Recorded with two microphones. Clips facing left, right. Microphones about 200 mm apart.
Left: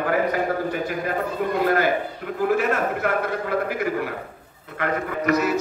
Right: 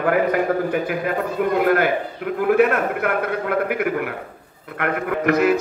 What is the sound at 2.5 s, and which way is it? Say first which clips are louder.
Speech: right 6 dB; 60° right (ahead or behind).